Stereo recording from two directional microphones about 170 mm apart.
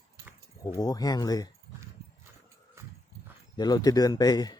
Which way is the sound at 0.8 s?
20° left (ahead or behind).